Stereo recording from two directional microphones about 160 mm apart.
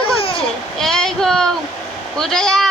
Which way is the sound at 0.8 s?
Centre (ahead or behind).